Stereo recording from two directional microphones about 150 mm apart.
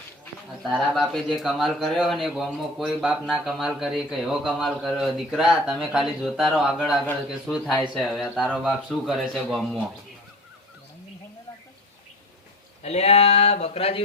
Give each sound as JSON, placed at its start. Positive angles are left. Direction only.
{"t": 0.7, "sound": "a man's voice", "side_deg": 0}
{"t": 12.8, "sound": "speech", "side_deg": 45}